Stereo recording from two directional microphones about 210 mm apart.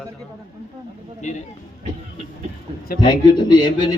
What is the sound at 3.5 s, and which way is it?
Speech, 20° left (ahead or behind).